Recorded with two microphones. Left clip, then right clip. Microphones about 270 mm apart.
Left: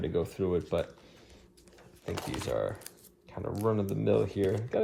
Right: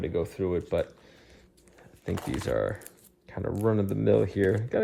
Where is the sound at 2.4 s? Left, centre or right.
Right.